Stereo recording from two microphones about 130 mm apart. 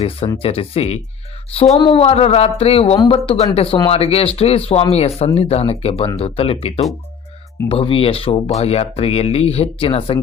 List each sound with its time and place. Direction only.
0.4 s speech: 50° left (ahead or behind)